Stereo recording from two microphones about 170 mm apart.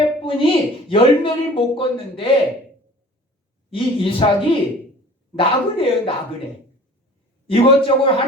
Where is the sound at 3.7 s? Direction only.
30° left (ahead or behind).